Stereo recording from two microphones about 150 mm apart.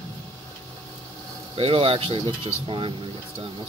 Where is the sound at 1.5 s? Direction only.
35° right (ahead or behind).